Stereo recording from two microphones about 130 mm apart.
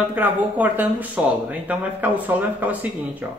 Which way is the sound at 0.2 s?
15° right (ahead or behind).